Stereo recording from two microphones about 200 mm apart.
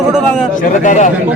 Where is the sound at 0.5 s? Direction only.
40° left (ahead or behind).